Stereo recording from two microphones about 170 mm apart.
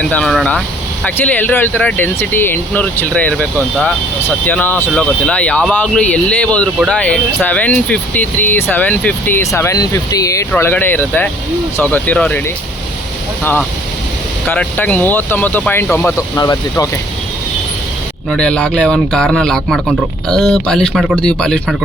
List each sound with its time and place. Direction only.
0.1 s speech: 5° left (ahead or behind)
4.4 s speech: 10° left (ahead or behind)
13.4 s speech: 10° left (ahead or behind)
18.3 s speech: 5° left (ahead or behind)